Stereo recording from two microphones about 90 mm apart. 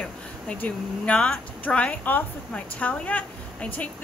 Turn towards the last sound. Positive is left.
turn(degrees=15)  # may be behind; listen again after turning